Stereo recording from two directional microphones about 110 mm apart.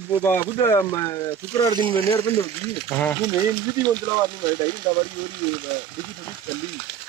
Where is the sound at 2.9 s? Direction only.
15° left (ahead or behind).